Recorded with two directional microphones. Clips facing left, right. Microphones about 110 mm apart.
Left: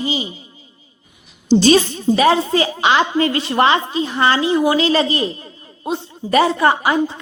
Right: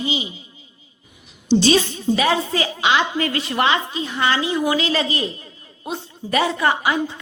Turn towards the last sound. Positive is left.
turn(degrees=35)  # may be behind; listen again after turning